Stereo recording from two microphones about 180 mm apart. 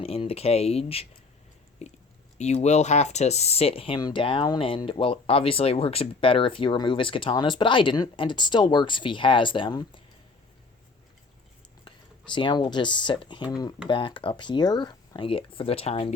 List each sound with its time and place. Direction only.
0.0 s speech: 35° left (ahead or behind)
11.9 s speech: 25° left (ahead or behind)